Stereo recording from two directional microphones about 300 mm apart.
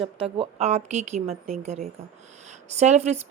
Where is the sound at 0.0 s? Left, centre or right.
Centre.